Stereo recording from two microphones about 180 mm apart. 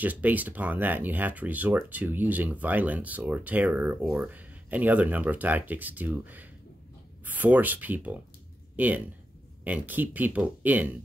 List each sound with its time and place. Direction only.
0.0 s speech: 10° right (ahead or behind)